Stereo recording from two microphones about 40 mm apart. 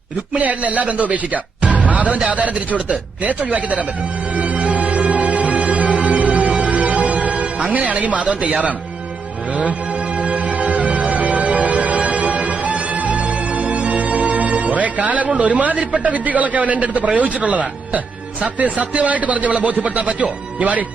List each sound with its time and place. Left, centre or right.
0.3 s a man's voice: right
4.4 s music: right
7.8 s a man's voice: right
10.2 s music: right
18.4 s a man's voice: right